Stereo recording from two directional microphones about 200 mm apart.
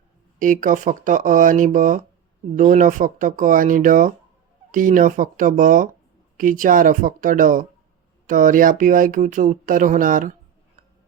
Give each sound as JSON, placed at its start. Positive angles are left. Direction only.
{"t": 0.3, "sound": "speech", "side_deg": -40}